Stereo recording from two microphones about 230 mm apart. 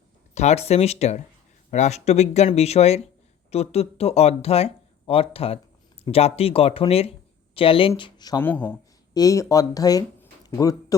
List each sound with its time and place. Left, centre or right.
0.3 s speech: left